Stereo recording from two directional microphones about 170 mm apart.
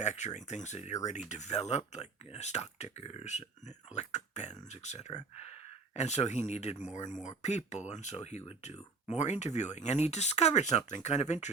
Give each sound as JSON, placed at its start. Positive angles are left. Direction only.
{"t": 0.0, "sound": "speech", "side_deg": 45}